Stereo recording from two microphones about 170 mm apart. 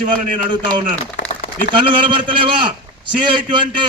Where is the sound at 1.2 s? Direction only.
90° left.